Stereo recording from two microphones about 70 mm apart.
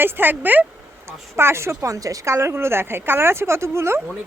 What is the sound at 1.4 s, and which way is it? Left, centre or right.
A woman's voice, right.